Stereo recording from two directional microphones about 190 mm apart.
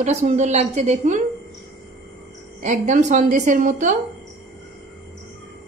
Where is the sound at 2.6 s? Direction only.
40° right (ahead or behind).